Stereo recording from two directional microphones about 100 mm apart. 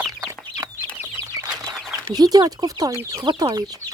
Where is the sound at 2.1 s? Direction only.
40° right (ahead or behind).